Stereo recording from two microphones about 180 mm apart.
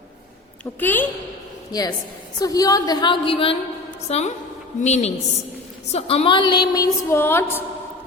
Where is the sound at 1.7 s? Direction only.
20° left (ahead or behind).